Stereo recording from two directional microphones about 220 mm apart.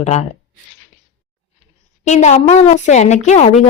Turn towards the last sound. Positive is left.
turn(degrees=30)  # may be behind; listen again after turning